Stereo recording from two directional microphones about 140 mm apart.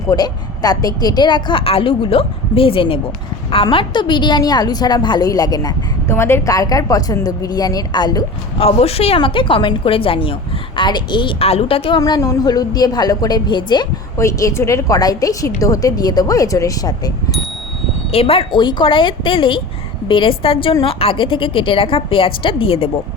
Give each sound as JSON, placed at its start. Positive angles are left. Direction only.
{"t": 0.1, "sound": "a woman's voice", "side_deg": 30}
{"t": 11.9, "sound": "a woman's voice", "side_deg": 30}
{"t": 18.1, "sound": "a woman's voice", "side_deg": 45}